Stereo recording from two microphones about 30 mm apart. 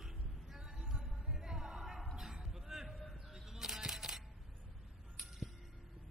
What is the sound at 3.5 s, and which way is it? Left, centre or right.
Single-lens reflex camera, centre.